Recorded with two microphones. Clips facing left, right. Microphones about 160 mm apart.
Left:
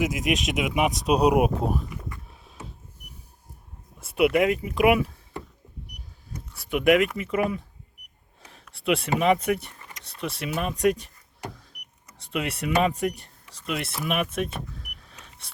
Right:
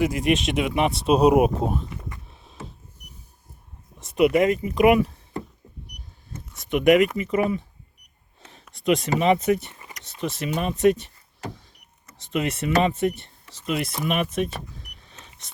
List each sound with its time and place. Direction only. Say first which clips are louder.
0.3 s speech: right 3 dB; 5° left (ahead or behind)
1.9 s a sound: even; 20° right (ahead or behind)
2.3 s a sound: right 3 dB; 5° left (ahead or behind)
4.0 s speech: right 2 dB; 5° left (ahead or behind)
6.3 s speech: right 3 dB; 5° left (ahead or behind)
12.3 s speech: right 3 dB; 10° left (ahead or behind)